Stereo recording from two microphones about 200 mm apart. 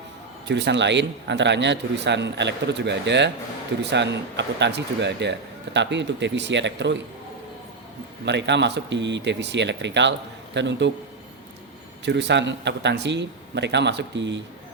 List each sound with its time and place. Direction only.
0.4 s speech: 60° right (ahead or behind)
8.2 s speech: 60° right (ahead or behind)
12.0 s speech: 60° right (ahead or behind)